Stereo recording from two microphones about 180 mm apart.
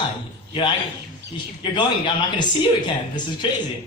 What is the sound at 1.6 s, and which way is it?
A man's voice, 25° left (ahead or behind).